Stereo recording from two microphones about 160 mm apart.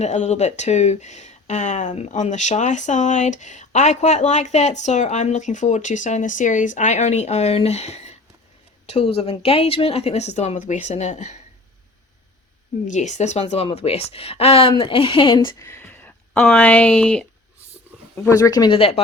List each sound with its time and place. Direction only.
0.0 s speech: 45° left (ahead or behind)
12.9 s speech: 50° left (ahead or behind); by 15.6 s 30° left (ahead or behind)
15.6 s speech: 15° left (ahead or behind)
18.3 s speech: 20° left (ahead or behind)